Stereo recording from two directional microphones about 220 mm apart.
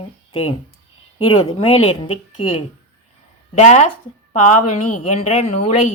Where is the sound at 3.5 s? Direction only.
30° left (ahead or behind).